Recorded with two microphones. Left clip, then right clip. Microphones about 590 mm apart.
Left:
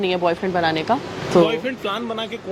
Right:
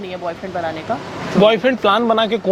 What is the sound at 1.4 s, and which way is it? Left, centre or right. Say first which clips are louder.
Speech: right 8 dB; right.